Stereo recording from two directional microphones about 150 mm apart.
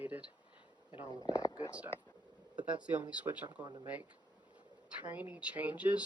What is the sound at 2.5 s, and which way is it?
Speech, 10° right (ahead or behind).